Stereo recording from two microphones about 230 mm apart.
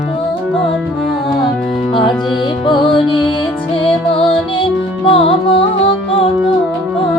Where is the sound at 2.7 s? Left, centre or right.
Left.